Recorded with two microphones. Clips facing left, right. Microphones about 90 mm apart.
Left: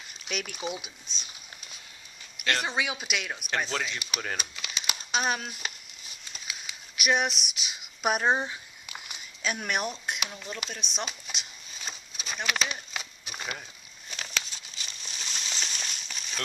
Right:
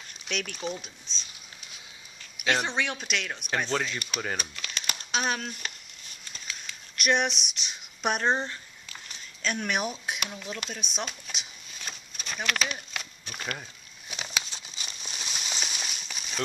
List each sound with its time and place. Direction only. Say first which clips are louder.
0.3 s speech: right 1 dB; 5° left (ahead or behind)
2.3 s speech: right 2 dB; centre (ahead or behind)
4.6 s crumpling: even; 5° left (ahead or behind)
6.2 s speech: even; 5° left (ahead or behind)
11.3 s a sound: even; 5° left (ahead or behind)
13.6 s a sound: right 1 dB; 10° right (ahead or behind)